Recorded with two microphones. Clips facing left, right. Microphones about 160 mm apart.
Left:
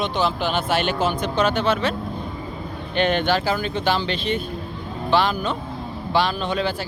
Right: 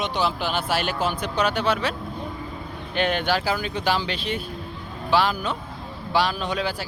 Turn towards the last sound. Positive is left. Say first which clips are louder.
# left 3 dB
turn(degrees=-5)  # may be behind; listen again after turning